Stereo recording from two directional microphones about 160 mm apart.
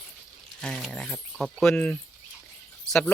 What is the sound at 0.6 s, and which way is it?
Speech, 5° left (ahead or behind).